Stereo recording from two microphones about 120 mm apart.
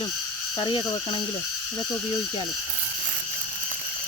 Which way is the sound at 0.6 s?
40° left (ahead or behind).